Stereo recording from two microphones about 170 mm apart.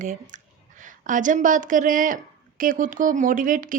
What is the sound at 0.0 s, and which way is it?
A woman's voice, 50° right (ahead or behind).